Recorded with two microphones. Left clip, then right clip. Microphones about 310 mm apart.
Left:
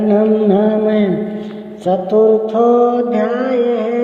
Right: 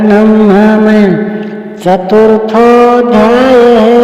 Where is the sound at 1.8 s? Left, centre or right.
Right.